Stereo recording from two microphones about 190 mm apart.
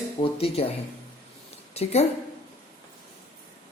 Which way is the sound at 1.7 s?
35° left (ahead or behind).